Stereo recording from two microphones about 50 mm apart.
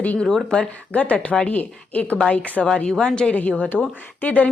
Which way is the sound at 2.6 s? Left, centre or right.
Centre.